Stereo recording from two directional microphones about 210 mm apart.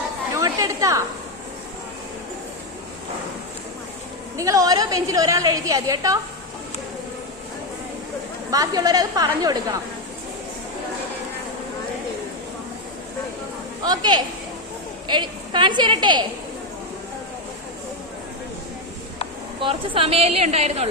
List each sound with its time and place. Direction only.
0.3 s chatter: 15° right (ahead or behind)
4.4 s a woman's voice: 15° right (ahead or behind)
8.4 s a woman's voice: 15° right (ahead or behind)
13.8 s a woman's voice: 20° right (ahead or behind)
19.6 s a woman's voice: 25° right (ahead or behind)